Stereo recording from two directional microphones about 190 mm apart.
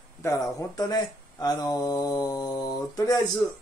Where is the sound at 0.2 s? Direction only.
15° left (ahead or behind).